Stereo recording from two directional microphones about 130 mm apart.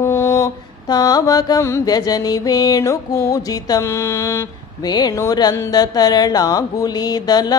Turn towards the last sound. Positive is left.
turn(degrees=30)  # may be behind; listen again after turning